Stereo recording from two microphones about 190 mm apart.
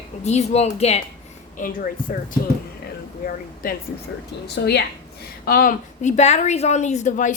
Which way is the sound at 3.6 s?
45° left (ahead or behind).